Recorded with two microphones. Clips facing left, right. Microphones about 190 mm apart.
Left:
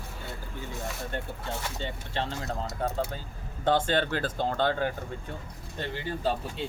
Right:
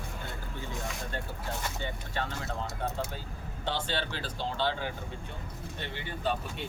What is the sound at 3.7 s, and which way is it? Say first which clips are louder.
Speech: left 8 dB; 50° left (ahead or behind).